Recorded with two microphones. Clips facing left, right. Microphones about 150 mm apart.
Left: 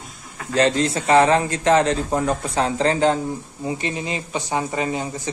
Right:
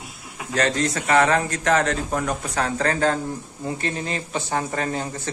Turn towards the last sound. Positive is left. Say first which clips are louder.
# left 2 dB
turn(degrees=10)  # may be behind; listen again after turning